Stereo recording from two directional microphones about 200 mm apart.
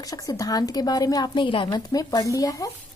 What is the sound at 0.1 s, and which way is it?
A woman's voice, 15° left (ahead or behind).